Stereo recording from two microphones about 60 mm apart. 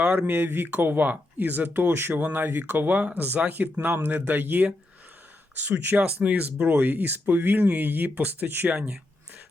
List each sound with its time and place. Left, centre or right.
0.0 s speech: right
0.3 s speech: right